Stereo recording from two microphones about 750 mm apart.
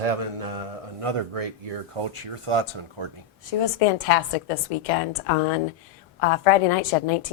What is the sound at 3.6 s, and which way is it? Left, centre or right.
A woman's voice, left.